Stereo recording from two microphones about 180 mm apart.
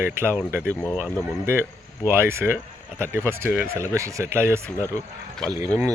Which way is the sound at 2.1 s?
15° right (ahead or behind).